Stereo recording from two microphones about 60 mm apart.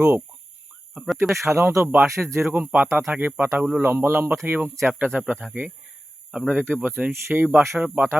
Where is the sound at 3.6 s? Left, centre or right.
Centre.